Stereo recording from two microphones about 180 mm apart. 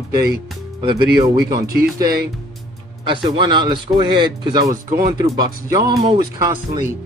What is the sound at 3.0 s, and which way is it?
Speech, 25° right (ahead or behind).